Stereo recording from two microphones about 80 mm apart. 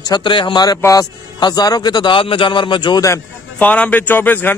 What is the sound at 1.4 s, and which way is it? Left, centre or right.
A man's voice, left.